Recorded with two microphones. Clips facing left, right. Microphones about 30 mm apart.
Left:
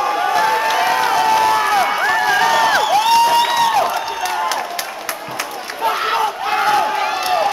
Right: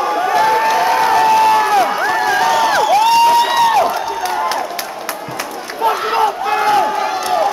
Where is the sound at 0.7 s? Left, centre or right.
Centre.